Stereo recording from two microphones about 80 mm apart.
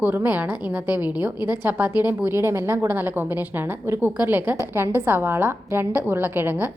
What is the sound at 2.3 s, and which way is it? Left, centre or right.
A woman's voice, right.